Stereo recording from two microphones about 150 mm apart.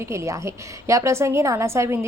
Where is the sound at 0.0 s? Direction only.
20° right (ahead or behind).